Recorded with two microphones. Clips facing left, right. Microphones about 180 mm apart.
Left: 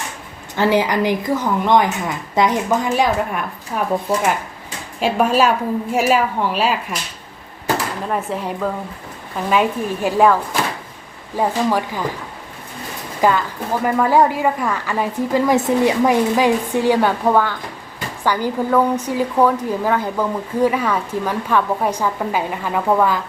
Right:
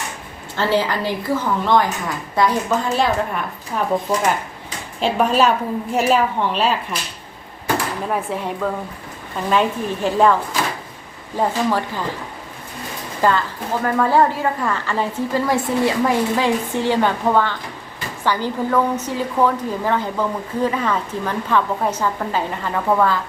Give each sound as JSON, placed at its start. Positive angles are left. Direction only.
{"t": 0.5, "sound": "speech", "side_deg": 15}
{"t": 8.1, "sound": "speech", "side_deg": 0}
{"t": 11.3, "sound": "speech", "side_deg": 10}
{"t": 13.2, "sound": "speech", "side_deg": 15}